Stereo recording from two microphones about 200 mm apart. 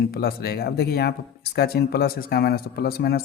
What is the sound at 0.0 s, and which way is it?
Speech, 50° left (ahead or behind).